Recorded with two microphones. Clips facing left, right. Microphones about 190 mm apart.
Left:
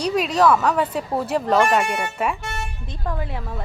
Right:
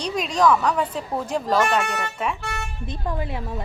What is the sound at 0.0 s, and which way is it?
Speech, 5° left (ahead or behind).